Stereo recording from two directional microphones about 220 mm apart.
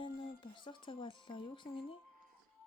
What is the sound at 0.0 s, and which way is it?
Speech, 20° left (ahead or behind).